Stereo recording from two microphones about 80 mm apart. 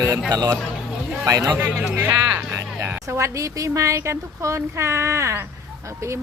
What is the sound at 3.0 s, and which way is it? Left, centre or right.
Speech, right.